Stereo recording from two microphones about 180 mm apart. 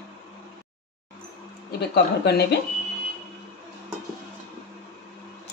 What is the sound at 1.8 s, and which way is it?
Speech, 65° left (ahead or behind).